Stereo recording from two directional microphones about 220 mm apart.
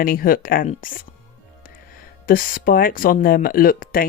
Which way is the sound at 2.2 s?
40° left (ahead or behind).